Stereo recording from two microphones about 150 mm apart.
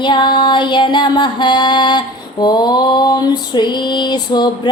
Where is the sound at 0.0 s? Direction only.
30° left (ahead or behind).